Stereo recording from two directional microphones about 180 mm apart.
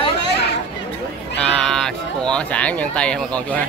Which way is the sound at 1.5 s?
5° left (ahead or behind).